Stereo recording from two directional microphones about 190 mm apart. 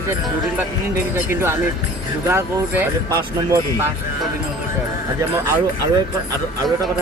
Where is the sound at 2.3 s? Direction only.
15° right (ahead or behind).